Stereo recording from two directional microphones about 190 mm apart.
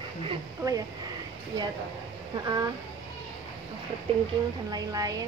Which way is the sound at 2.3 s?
20° right (ahead or behind).